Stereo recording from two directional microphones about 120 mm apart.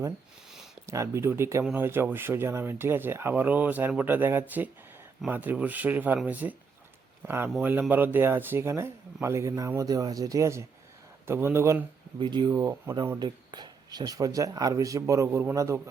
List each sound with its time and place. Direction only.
0.9 s speech: 25° right (ahead or behind)
12.2 s speech: 35° right (ahead or behind)
12.5 s speech: 25° right (ahead or behind)
13.1 s speech: 35° right (ahead or behind)